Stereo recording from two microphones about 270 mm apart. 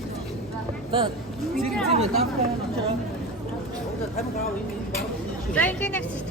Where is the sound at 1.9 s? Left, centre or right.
Right.